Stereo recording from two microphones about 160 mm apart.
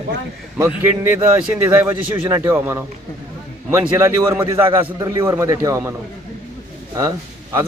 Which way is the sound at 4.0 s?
15° right (ahead or behind).